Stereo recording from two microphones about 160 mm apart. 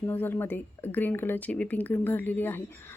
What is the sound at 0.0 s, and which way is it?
A woman's voice, 10° left (ahead or behind).